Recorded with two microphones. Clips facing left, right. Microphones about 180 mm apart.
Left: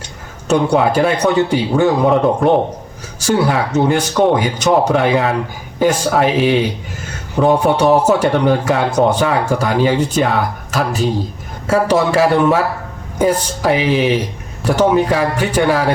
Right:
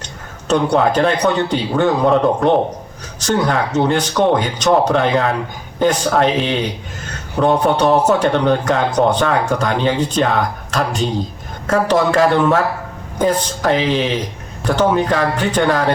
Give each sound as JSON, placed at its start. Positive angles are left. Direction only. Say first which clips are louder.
{"t": 0.4, "sound": "a man's voice", "louder": "left 1 dB", "side_deg": 10}